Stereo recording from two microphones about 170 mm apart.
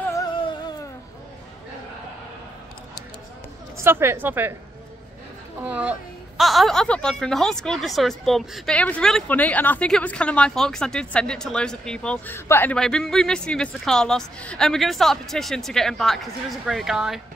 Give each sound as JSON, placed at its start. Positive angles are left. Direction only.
{"t": 0.1, "sound": "music", "side_deg": 25}
{"t": 3.8, "sound": "a woman's voice", "side_deg": -15}
{"t": 5.7, "sound": "a woman's voice", "side_deg": -10}